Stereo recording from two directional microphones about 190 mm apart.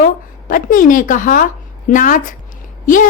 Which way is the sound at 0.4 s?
45° left (ahead or behind).